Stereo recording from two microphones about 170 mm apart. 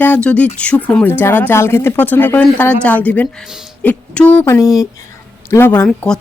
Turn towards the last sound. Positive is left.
turn(degrees=5)  # may be behind; listen again after turning